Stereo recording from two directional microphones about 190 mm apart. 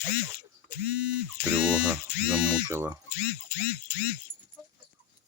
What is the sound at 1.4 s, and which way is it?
Speech, 5° right (ahead or behind).